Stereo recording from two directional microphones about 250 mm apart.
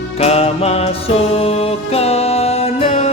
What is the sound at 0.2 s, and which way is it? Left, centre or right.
Music, left.